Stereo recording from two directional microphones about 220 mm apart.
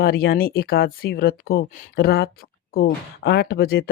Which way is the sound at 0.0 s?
45° left (ahead or behind).